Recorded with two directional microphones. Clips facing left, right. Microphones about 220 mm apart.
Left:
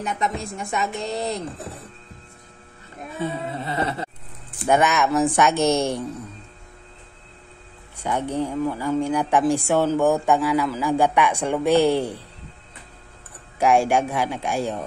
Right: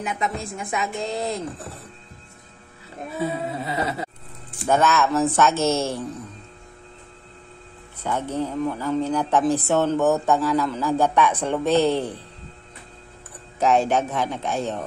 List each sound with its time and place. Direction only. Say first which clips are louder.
0.0 s a woman's voice: left 1 dB; centre (ahead or behind)
3.2 s a woman's voice: right 1 dB; 5° right (ahead or behind)
4.6 s speech: even; 15° left (ahead or behind)
8.0 s speech: left 1 dB; 15° left (ahead or behind)
13.6 s speech: left 1 dB; 10° left (ahead or behind)